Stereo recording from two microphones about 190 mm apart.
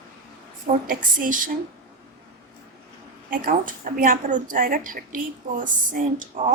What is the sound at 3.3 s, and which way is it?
A woman's voice, 45° right (ahead or behind).